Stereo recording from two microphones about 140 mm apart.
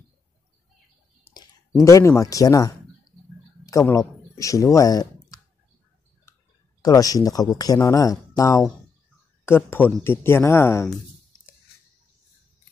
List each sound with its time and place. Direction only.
1.3 s clicking: 15° left (ahead or behind)
1.9 s speech: 20° left (ahead or behind)
3.8 s speech: 20° left (ahead or behind)
6.8 s speech: 25° left (ahead or behind)